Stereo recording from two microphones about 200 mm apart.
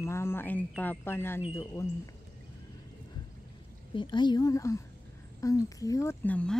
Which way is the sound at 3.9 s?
25° left (ahead or behind).